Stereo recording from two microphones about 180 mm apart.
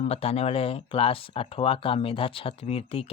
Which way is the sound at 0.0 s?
35° left (ahead or behind).